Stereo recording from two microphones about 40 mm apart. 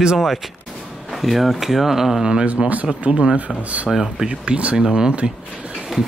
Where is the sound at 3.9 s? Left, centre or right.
Centre.